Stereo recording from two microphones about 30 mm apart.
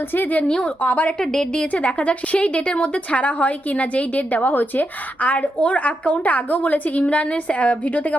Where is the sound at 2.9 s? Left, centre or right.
Left.